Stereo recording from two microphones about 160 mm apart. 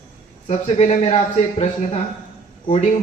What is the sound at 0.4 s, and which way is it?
Speech, 40° left (ahead or behind).